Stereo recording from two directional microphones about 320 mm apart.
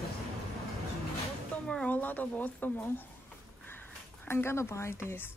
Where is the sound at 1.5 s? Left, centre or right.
Centre.